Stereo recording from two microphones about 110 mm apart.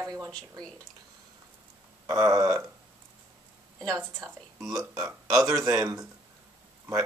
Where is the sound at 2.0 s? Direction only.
30° right (ahead or behind).